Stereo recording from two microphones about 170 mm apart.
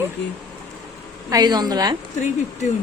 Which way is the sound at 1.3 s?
25° right (ahead or behind).